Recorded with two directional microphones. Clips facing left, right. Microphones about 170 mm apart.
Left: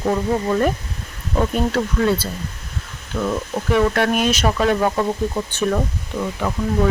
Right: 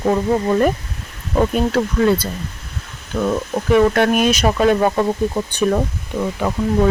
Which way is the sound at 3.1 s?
30° right (ahead or behind).